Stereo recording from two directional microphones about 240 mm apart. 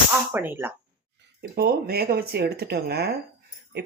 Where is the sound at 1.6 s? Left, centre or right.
Right.